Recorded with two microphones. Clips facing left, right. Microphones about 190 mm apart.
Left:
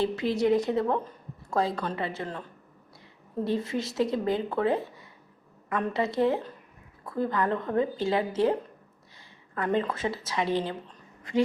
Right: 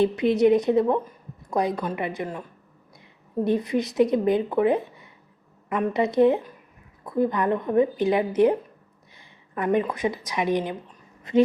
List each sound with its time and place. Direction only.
0.0 s a woman's voice: 20° right (ahead or behind)
3.4 s a woman's voice: 15° right (ahead or behind)
9.6 s a woman's voice: 15° right (ahead or behind)